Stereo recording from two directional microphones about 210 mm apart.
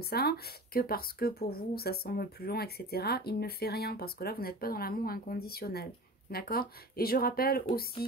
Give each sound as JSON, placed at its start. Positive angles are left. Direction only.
{"t": 0.0, "sound": "speech", "side_deg": 50}